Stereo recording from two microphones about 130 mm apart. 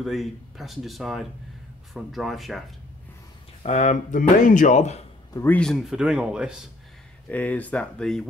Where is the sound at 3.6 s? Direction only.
65° left (ahead or behind).